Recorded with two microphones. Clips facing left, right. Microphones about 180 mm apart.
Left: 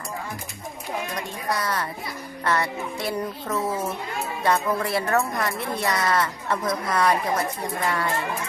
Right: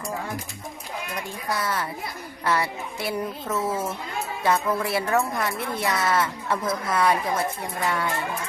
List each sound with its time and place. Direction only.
1.5 s a woman's voice: 5° right (ahead or behind)